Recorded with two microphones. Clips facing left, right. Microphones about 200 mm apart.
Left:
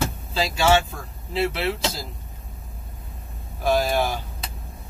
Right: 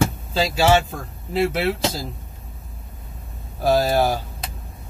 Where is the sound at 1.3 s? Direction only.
45° right (ahead or behind).